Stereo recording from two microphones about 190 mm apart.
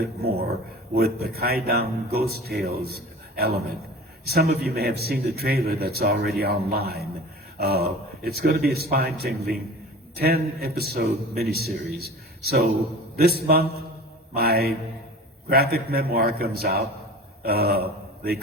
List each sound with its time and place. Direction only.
0.0 s a man's voice: 55° right (ahead or behind)